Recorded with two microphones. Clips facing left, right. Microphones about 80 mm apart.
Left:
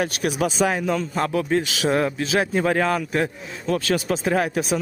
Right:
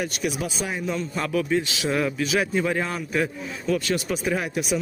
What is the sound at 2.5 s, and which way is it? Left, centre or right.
Speech, left.